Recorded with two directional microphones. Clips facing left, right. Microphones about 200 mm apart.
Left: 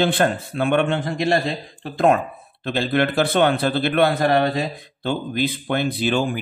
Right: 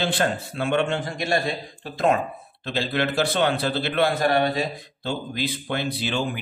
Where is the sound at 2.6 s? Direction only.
55° left (ahead or behind).